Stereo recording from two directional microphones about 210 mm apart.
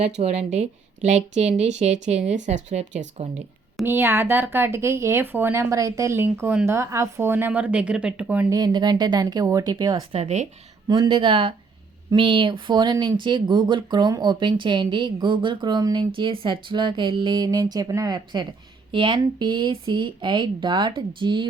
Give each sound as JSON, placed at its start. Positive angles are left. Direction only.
{"t": 0.0, "sound": "a woman's voice", "side_deg": -30}
{"t": 3.8, "sound": "speech", "side_deg": -10}
{"t": 8.5, "sound": "speech", "side_deg": -20}
{"t": 10.2, "sound": "a woman's voice", "side_deg": -30}
{"t": 10.8, "sound": "speech", "side_deg": -20}